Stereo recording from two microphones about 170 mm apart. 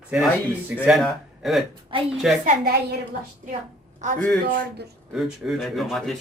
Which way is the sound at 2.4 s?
60° right (ahead or behind).